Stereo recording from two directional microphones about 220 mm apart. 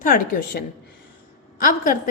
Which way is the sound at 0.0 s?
35° left (ahead or behind).